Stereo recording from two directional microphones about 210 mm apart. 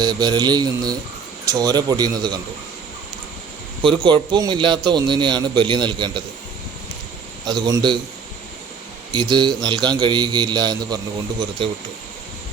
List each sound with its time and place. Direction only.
0.0 s a man's voice: 20° right (ahead or behind)
3.8 s a man's voice: 20° right (ahead or behind)
7.4 s a man's voice: 20° right (ahead or behind)
9.1 s a man's voice: 20° right (ahead or behind)